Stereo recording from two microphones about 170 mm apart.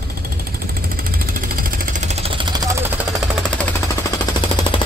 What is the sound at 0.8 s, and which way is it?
Jackhammer, 60° right (ahead or behind).